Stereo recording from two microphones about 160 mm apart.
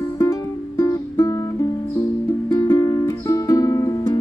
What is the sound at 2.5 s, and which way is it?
Music, 25° left (ahead or behind).